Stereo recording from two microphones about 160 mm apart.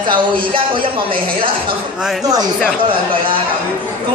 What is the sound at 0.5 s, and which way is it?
Mantra, 30° right (ahead or behind).